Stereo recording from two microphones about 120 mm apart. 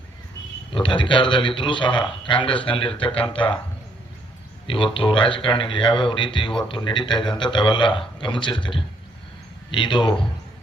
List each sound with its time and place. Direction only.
0.7 s a man's voice: 45° left (ahead or behind)
4.6 s a man's voice: 45° left (ahead or behind)